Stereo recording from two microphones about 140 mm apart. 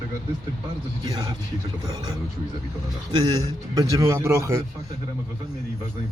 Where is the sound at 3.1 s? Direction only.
30° right (ahead or behind).